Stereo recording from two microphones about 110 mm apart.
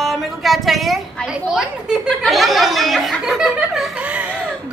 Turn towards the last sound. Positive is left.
turn(degrees=-10)  # may be behind; listen again after turning